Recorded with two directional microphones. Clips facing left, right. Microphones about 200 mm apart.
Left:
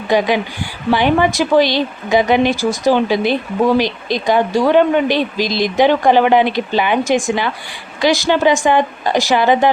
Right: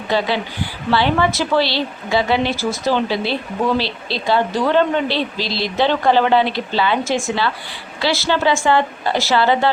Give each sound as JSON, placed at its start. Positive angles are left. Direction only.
{"t": 0.1, "sound": "a woman's voice", "side_deg": 15}